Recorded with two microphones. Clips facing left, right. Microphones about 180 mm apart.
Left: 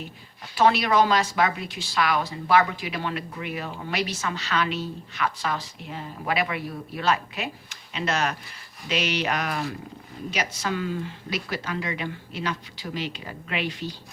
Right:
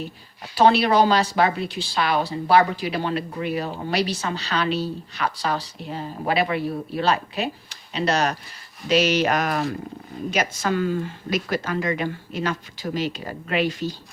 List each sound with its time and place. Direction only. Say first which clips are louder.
0.5 s speech: right 3 dB; 30° right (ahead or behind)